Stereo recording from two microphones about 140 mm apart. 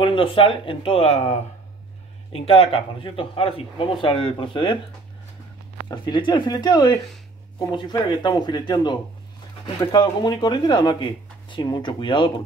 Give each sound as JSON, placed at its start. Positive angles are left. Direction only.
{"t": 0.0, "sound": "speech", "side_deg": 40}
{"t": 2.3, "sound": "speech", "side_deg": 40}
{"t": 5.9, "sound": "speech", "side_deg": 35}
{"t": 8.2, "sound": "speech", "side_deg": 30}